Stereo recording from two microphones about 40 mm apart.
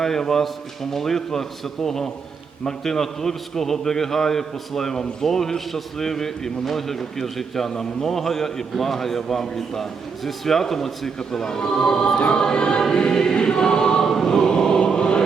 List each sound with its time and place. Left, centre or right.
0.0 s a man's voice: centre
11.2 s choir: centre
14.0 s choir: centre; by 15.2 s left